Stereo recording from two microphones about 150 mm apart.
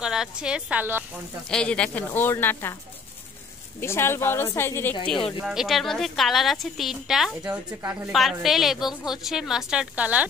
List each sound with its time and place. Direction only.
0.0 s a woman's voice: 5° right (ahead or behind)
1.5 s speech: 5° left (ahead or behind)
3.8 s speech: 15° left (ahead or behind)
5.4 s a woman's voice: 5° right (ahead or behind)
8.1 s a woman's voice: centre (ahead or behind)